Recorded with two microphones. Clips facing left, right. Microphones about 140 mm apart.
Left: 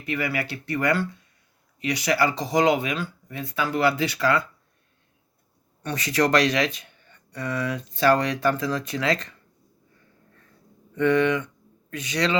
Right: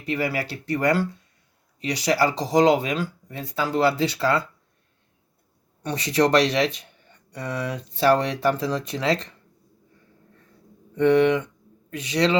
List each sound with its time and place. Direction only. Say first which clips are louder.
0.0 s speech: right 2 dB; 35° right (ahead or behind)
5.9 s speech: right 2 dB; 25° right (ahead or behind)
7.3 s speech: left 1 dB; 15° right (ahead or behind)
7.7 s speech: right 1 dB; 25° right (ahead or behind)
10.9 s speech: right 3 dB; 25° right (ahead or behind)